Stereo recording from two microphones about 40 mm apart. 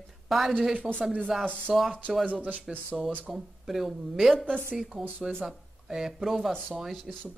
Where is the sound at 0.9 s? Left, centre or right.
Right.